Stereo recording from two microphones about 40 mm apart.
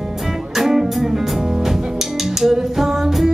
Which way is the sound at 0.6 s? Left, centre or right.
Centre.